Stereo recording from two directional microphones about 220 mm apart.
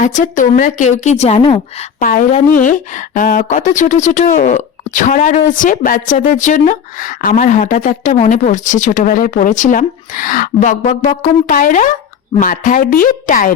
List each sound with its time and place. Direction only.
0.0 s speech: 35° left (ahead or behind)